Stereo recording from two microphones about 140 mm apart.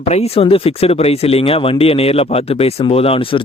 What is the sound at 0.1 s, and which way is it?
Speech, 50° left (ahead or behind).